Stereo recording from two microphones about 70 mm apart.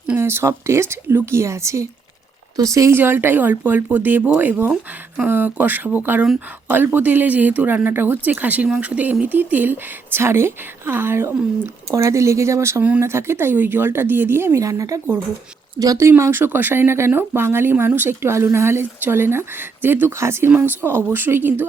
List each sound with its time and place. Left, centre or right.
0.2 s a woman's voice: right
2.9 s a woman's voice: right
11.9 s a woman's voice: right
14.6 s speech: right
16.0 s a woman's voice: right